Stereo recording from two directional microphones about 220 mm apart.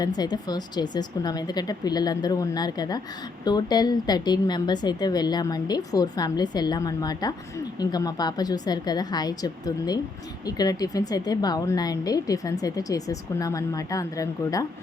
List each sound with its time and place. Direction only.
0.2 s a woman's voice: 20° left (ahead or behind)